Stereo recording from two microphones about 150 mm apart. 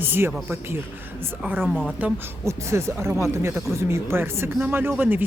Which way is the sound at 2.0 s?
20° right (ahead or behind).